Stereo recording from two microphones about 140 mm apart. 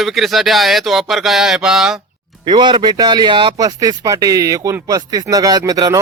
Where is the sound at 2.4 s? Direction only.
35° right (ahead or behind).